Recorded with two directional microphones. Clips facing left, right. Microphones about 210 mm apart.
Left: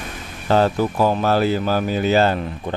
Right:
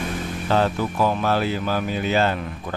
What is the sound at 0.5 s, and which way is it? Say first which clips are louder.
Speech: left 4 dB; 40° left (ahead or behind).